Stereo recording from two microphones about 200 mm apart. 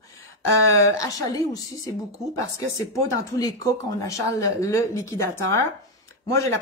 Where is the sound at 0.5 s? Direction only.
15° left (ahead or behind).